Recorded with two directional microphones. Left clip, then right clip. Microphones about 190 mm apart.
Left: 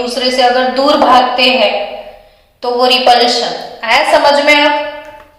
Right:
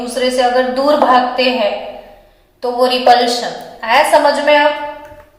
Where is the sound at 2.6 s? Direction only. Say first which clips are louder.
Left 3 dB; 25° right (ahead or behind).